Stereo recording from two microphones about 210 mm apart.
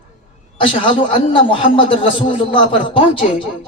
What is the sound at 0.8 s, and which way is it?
A man's voice, 25° left (ahead or behind).